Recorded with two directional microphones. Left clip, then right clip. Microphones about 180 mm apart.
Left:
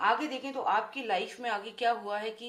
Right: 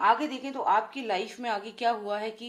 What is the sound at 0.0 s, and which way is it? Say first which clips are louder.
Speech: right 4 dB; 30° right (ahead or behind).